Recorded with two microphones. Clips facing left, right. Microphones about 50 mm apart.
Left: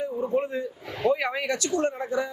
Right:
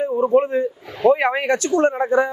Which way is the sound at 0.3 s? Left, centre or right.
Right.